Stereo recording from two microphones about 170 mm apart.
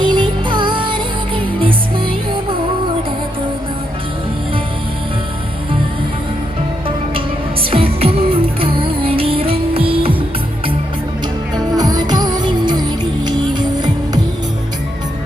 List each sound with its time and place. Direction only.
0.0 s music: 30° right (ahead or behind)
7.6 s music: 30° right (ahead or behind)
11.5 s music: 25° right (ahead or behind)